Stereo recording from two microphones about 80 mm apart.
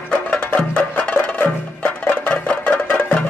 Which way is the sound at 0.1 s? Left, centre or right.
Centre.